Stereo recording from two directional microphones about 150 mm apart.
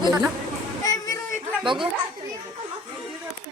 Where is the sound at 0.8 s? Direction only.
25° left (ahead or behind).